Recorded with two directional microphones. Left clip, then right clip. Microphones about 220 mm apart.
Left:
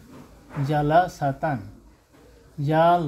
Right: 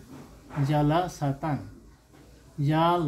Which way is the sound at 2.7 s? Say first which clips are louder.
Left 5 dB; 30° left (ahead or behind).